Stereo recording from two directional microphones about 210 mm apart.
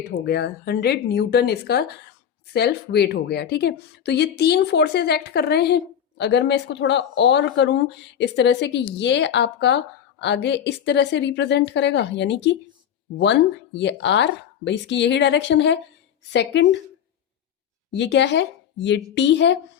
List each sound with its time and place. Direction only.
0.3 s speech: 50° left (ahead or behind)
17.9 s speech: 55° left (ahead or behind)